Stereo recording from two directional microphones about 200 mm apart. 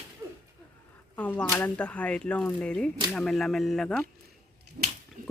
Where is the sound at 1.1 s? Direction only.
10° left (ahead or behind).